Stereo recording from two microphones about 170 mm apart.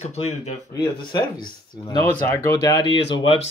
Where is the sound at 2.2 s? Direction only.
15° left (ahead or behind); by 3.4 s 35° left (ahead or behind).